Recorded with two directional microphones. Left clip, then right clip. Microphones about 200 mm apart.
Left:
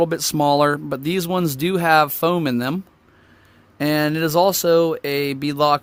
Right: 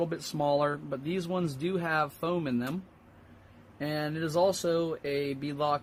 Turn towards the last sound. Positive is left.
turn(degrees=55)  # may be behind; listen again after turning